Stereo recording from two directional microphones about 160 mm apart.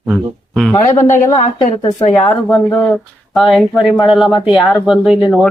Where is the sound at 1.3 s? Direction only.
30° left (ahead or behind).